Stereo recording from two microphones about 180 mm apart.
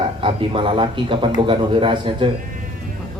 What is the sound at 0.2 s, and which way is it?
A man's voice, 30° right (ahead or behind).